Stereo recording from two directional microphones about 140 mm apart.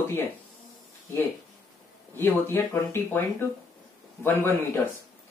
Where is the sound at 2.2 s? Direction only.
15° left (ahead or behind).